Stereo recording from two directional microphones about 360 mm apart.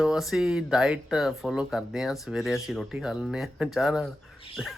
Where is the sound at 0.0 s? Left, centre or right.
Centre.